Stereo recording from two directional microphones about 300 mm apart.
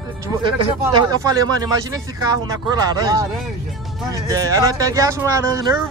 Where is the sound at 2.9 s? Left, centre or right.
Centre.